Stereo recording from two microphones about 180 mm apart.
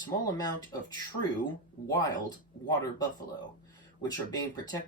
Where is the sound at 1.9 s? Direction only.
20° left (ahead or behind).